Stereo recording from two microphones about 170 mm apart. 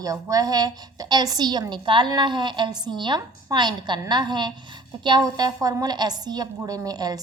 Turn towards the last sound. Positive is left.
turn(degrees=-25)  # may be behind; listen again after turning